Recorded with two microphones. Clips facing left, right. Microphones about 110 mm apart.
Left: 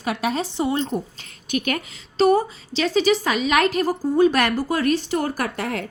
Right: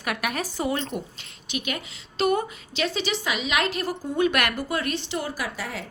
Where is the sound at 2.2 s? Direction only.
35° left (ahead or behind).